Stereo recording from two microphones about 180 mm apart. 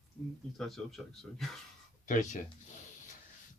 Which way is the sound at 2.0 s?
45° left (ahead or behind).